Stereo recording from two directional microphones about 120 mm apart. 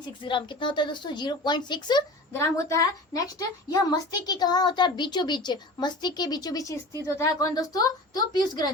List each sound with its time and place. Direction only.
0.3 s a woman's voice: 45° left (ahead or behind)
2.3 s a woman's voice: 25° left (ahead or behind)